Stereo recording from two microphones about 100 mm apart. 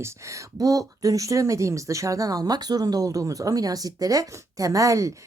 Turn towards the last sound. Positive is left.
turn(degrees=-35)  # may be behind; listen again after turning